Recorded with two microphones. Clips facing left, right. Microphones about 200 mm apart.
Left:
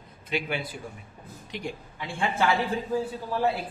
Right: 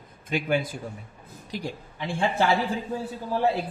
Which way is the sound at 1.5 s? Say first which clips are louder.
Right 2 dB; 35° right (ahead or behind).